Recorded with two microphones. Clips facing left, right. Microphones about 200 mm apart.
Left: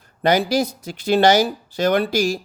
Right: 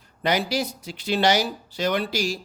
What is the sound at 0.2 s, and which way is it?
Speech, 45° left (ahead or behind).